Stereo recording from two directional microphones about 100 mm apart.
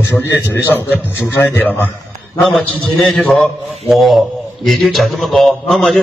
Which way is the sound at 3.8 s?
Centre (ahead or behind).